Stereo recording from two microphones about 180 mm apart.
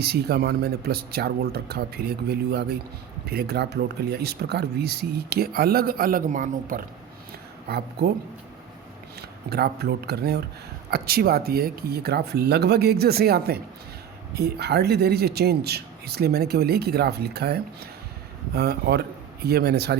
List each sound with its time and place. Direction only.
0.0 s speech: 65° right (ahead or behind)
7.7 s speech: 60° right (ahead or behind)
9.5 s speech: 60° right (ahead or behind)